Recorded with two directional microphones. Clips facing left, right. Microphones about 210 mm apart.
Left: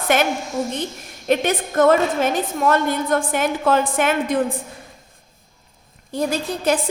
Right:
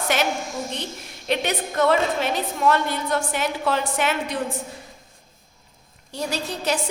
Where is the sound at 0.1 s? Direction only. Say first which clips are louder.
Left 5 dB; 50° left (ahead or behind).